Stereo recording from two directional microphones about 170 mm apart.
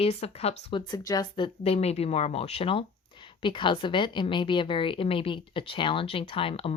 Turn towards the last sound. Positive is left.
turn(degrees=35)  # may be behind; listen again after turning